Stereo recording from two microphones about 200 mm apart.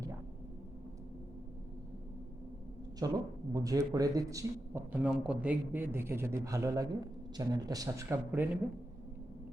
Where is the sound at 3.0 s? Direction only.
20° right (ahead or behind).